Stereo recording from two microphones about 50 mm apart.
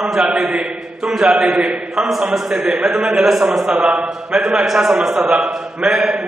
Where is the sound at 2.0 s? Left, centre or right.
Centre.